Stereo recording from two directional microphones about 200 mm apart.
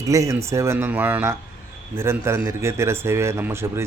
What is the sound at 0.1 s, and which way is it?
A man's voice, 15° right (ahead or behind).